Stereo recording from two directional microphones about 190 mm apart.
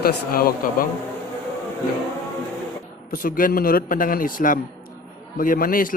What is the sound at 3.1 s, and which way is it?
Speech, 45° left (ahead or behind).